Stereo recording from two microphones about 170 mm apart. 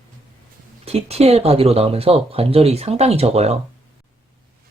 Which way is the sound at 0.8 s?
35° right (ahead or behind).